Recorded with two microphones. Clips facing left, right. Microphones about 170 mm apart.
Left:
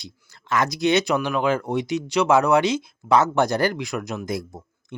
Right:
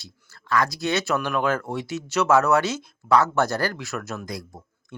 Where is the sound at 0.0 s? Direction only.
15° left (ahead or behind).